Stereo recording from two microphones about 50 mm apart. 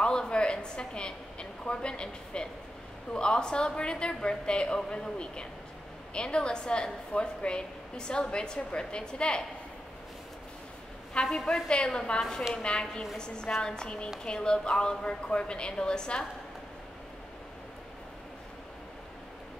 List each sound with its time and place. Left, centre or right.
0.0 s a woman's voice: centre
11.2 s a woman's voice: centre